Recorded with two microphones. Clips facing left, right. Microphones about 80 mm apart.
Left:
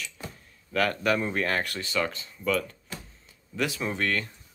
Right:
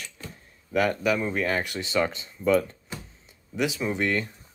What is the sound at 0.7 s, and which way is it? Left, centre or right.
Speech, centre.